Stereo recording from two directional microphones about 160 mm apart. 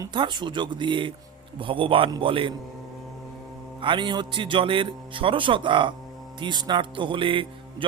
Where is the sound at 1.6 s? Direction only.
35° right (ahead or behind).